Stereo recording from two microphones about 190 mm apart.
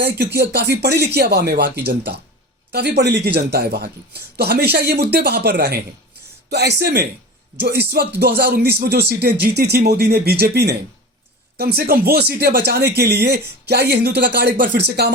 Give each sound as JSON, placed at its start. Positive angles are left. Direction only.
{"t": 0.0, "sound": "speech", "side_deg": -60}